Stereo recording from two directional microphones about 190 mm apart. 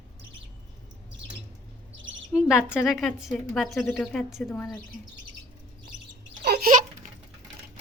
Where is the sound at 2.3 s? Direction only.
5° right (ahead or behind).